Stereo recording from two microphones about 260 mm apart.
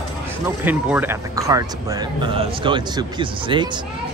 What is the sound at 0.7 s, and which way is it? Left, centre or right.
Speech, centre.